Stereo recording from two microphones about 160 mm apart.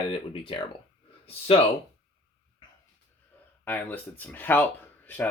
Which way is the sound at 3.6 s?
10° left (ahead or behind).